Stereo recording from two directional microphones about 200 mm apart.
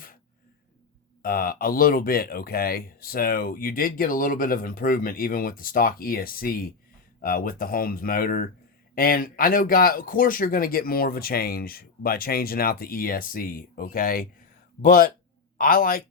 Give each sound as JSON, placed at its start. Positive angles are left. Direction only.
{"t": 1.2, "sound": "speech", "side_deg": 45}